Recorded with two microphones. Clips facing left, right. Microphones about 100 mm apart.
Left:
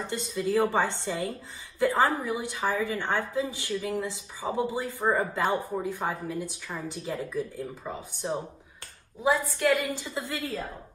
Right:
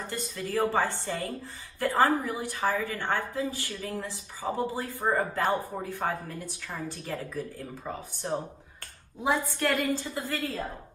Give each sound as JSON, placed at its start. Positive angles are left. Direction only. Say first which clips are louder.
{"t": 0.0, "sound": "a woman's voice", "louder": "left 5 dB", "side_deg": 20}
{"t": 9.8, "sound": "a woman's voice", "louder": "right 2 dB", "side_deg": 20}